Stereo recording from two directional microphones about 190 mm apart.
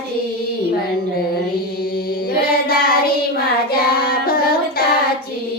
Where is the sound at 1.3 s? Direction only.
55° left (ahead or behind).